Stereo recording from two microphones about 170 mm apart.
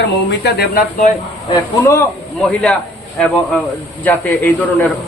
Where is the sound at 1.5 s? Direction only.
15° left (ahead or behind).